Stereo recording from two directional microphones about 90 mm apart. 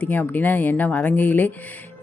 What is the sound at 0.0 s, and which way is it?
Speech, 20° left (ahead or behind).